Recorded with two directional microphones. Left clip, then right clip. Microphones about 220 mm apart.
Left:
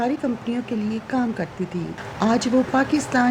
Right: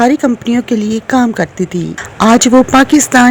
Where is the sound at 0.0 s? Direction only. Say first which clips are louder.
Right 13 dB; 40° right (ahead or behind).